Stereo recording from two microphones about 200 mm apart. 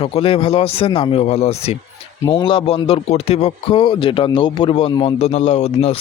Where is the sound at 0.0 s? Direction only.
30° left (ahead or behind).